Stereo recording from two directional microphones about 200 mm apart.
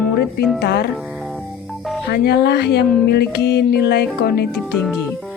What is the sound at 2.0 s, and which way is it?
Speech, 55° left (ahead or behind).